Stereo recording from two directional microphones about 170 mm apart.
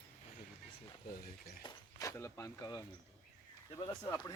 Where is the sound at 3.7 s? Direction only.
25° left (ahead or behind).